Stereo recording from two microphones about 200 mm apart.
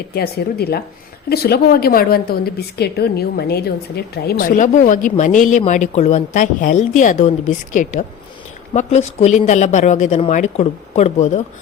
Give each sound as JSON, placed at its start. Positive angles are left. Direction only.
{"t": 0.1, "sound": "a woman's voice", "side_deg": 50}